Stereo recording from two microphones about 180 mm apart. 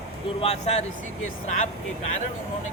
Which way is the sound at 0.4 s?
35° left (ahead or behind).